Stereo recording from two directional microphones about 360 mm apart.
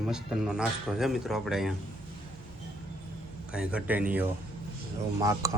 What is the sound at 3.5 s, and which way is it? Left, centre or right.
Speech, centre.